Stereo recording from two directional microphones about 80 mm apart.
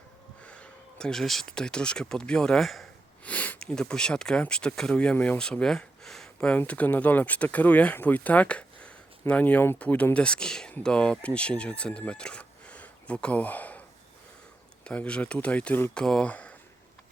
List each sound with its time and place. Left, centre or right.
0.4 s speech: centre
3.2 s a sound: left
3.6 s speech: centre
5.1 s speech: left
5.4 s speech: centre
6.6 s speech: centre
14.8 s speech: centre
16.3 s a sound: centre